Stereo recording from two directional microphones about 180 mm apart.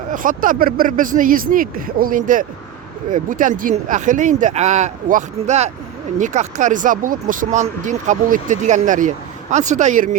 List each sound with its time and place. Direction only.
0.1 s speech: 50° right (ahead or behind)